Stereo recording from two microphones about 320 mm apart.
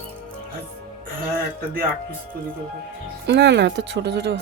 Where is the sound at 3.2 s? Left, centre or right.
Right.